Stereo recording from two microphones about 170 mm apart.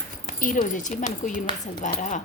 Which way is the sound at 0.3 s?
50° left (ahead or behind).